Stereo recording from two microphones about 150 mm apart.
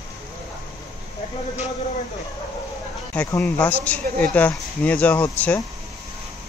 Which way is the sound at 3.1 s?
10° left (ahead or behind).